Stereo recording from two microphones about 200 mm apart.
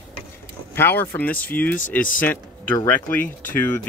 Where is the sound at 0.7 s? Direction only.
10° left (ahead or behind).